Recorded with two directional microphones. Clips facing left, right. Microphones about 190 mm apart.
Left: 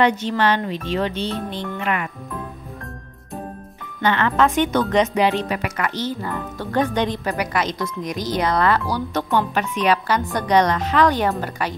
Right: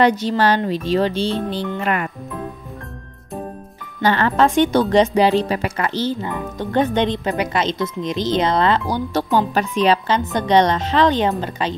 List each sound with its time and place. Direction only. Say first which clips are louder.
0.0 s speech: right 3 dB; 35° right (ahead or behind)
4.0 s speech: right 2 dB; 35° right (ahead or behind)
9.4 s speech: right 3 dB; 35° right (ahead or behind)